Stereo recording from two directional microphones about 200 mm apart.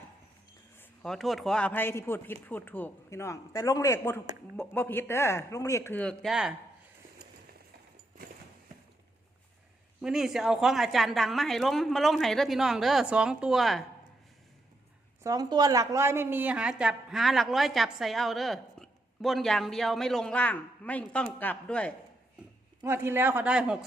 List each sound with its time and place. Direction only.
0.8 s speech: centre (ahead or behind)
10.0 s a woman's voice: centre (ahead or behind)
15.2 s a woman's voice: 20° right (ahead or behind); by 21.9 s 5° left (ahead or behind)
22.8 s speech: 10° right (ahead or behind)